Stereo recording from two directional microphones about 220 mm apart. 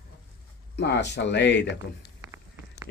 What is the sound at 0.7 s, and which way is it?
Speech, 50° left (ahead or behind).